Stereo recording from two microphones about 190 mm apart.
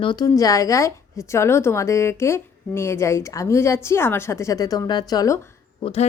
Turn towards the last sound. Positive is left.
turn(degrees=35)  # may be behind; listen again after turning